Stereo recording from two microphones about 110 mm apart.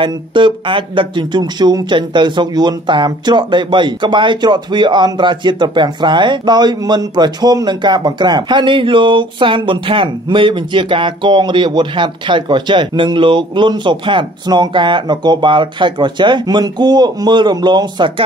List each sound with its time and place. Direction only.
0.0 s speech: 50° right (ahead or behind)